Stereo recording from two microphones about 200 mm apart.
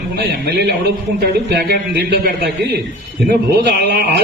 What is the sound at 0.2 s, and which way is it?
A man's voice, 55° right (ahead or behind).